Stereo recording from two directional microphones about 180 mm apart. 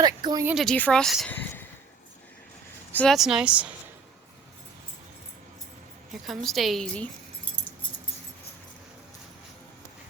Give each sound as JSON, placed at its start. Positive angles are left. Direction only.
{"t": 0.0, "sound": "speech", "side_deg": -20}
{"t": 0.4, "sound": "speech", "side_deg": 0}
{"t": 2.9, "sound": "speech", "side_deg": 5}
{"t": 6.2, "sound": "speech", "side_deg": 0}